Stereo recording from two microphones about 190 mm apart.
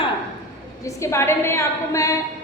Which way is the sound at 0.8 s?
15° left (ahead or behind).